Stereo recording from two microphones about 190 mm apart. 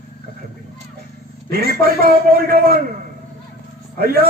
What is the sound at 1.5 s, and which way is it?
Speech, 55° right (ahead or behind).